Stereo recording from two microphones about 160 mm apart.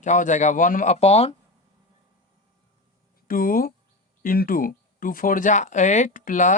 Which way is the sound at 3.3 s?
60° left (ahead or behind).